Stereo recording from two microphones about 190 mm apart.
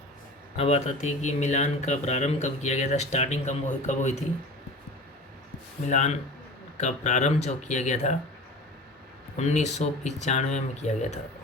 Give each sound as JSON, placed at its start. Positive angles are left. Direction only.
{"t": 0.5, "sound": "speech", "side_deg": 35}
{"t": 5.9, "sound": "speech", "side_deg": 40}
{"t": 9.4, "sound": "speech", "side_deg": 35}